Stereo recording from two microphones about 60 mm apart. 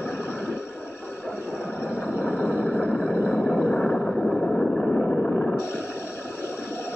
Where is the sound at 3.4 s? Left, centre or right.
Centre.